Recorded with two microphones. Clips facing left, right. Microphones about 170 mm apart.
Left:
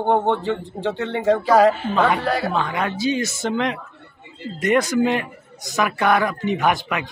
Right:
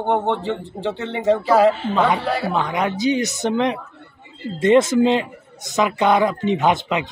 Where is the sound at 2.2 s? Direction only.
5° right (ahead or behind).